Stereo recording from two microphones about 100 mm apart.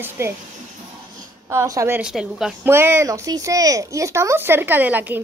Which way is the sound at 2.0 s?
5° right (ahead or behind).